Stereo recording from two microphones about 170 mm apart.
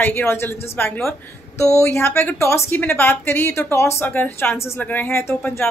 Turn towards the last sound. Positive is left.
turn(degrees=15)  # may be behind; listen again after turning